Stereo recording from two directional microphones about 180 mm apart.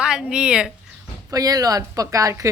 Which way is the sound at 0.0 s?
5° right (ahead or behind).